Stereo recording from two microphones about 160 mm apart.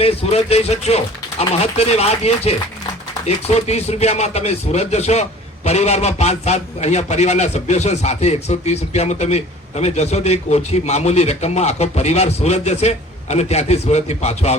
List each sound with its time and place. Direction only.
0.0 s a man's voice: 40° left (ahead or behind)